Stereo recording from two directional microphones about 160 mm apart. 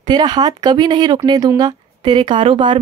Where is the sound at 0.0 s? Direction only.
25° right (ahead or behind).